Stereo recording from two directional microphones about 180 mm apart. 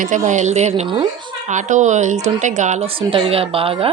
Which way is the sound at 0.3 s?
40° right (ahead or behind).